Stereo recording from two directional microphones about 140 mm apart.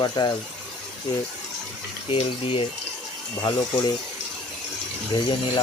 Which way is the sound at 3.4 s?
30° left (ahead or behind).